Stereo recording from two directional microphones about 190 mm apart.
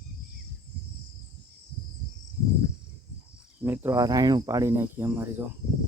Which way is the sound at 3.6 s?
10° right (ahead or behind).